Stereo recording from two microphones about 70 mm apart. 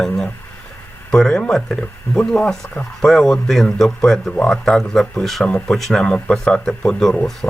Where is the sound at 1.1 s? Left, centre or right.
Centre.